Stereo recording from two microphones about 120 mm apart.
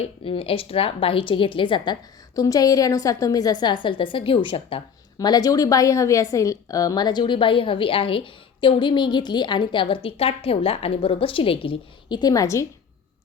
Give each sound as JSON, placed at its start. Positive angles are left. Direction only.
{"t": 0.0, "sound": "speech", "side_deg": 50}
{"t": 5.2, "sound": "a woman's voice", "side_deg": 35}